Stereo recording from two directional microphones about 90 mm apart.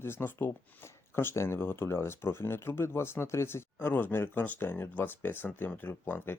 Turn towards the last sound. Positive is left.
turn(degrees=25)  # may be behind; listen again after turning